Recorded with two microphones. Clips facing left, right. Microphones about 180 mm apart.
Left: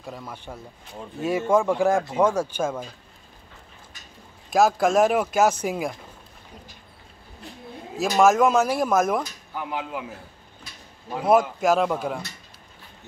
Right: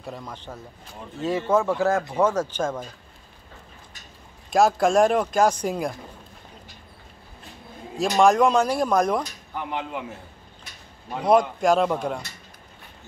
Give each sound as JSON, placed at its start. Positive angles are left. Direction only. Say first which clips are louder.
{"t": 0.0, "sound": "speech", "louder": "right 1 dB", "side_deg": 0}
{"t": 4.5, "sound": "speech", "louder": "even", "side_deg": 0}
{"t": 8.0, "sound": "speech", "louder": "even", "side_deg": 5}
{"t": 11.1, "sound": "speech", "louder": "even", "side_deg": 5}